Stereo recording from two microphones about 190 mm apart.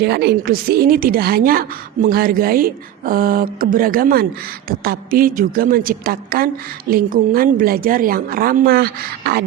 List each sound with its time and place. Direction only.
0.0 s a woman's voice: 60° right (ahead or behind)